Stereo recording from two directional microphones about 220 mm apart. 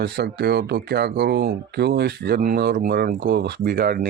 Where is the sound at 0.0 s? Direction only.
50° right (ahead or behind).